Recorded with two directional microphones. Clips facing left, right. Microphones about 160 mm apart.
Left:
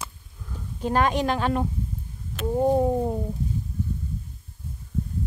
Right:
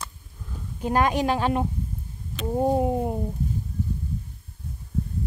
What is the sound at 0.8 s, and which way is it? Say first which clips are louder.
Speech: even; 10° right (ahead or behind).